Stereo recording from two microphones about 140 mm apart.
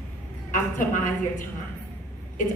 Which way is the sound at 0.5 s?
65° left (ahead or behind).